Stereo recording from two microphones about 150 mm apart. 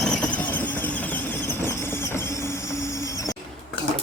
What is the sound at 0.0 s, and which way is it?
Vehicle, 5° left (ahead or behind).